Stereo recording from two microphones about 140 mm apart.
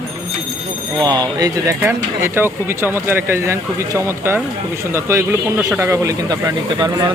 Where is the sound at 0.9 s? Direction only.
30° right (ahead or behind).